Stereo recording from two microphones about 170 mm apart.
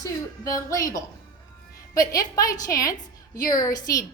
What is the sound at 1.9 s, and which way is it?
A woman's voice, 20° left (ahead or behind).